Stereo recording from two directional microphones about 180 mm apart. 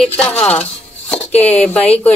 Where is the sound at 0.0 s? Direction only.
5° left (ahead or behind).